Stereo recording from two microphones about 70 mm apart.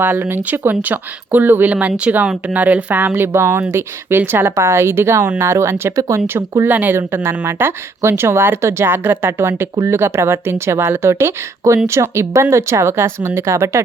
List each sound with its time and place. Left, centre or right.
0.0 s speech: right
3.1 s speech: right
6.7 s speech: right